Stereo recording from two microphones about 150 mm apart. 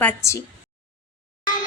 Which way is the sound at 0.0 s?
15° left (ahead or behind).